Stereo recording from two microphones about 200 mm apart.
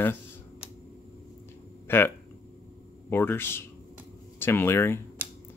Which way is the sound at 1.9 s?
10° left (ahead or behind).